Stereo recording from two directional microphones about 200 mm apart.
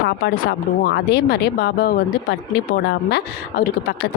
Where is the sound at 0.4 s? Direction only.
55° left (ahead or behind).